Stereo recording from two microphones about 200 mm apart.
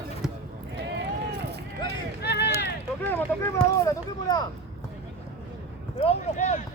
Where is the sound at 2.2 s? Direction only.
55° left (ahead or behind).